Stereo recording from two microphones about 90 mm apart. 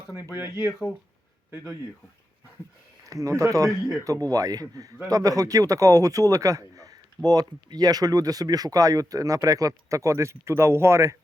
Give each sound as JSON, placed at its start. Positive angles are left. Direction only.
{"t": 0.2, "sound": "speech", "side_deg": -25}
{"t": 3.1, "sound": "speech", "side_deg": -40}